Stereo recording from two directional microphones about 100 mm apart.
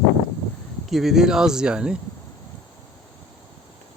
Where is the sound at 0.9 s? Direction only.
5° right (ahead or behind).